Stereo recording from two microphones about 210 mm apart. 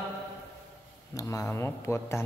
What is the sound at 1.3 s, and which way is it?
Speech, 15° left (ahead or behind).